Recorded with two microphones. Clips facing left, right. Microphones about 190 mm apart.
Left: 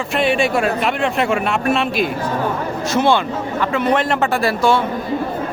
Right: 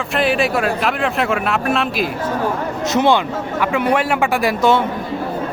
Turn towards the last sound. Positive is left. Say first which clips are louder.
# right 1 dB
turn(degrees=-15)  # may be behind; listen again after turning